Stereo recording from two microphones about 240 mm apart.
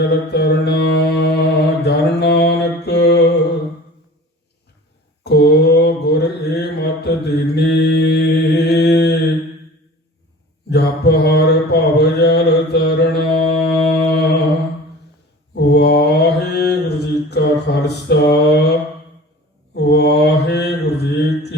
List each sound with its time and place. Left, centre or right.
0.0 s mantra: left
5.2 s mantra: left
10.7 s mantra: left
15.5 s mantra: left